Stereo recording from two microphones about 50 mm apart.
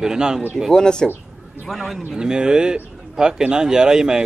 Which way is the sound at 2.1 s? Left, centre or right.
Centre.